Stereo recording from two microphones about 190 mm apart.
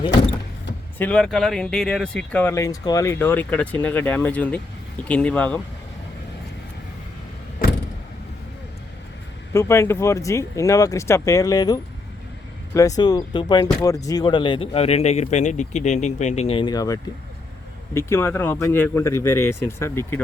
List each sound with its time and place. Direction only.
0.9 s speech: 5° left (ahead or behind)
9.5 s speech: 15° left (ahead or behind)